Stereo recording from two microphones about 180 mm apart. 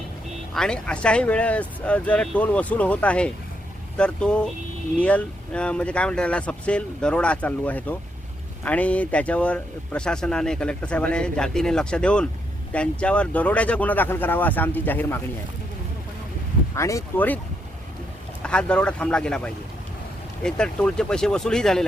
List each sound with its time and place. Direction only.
0.5 s speech: 5° left (ahead or behind)
16.7 s speech: 15° left (ahead or behind)
18.4 s speech: 5° left (ahead or behind)
20.4 s speech: 5° left (ahead or behind)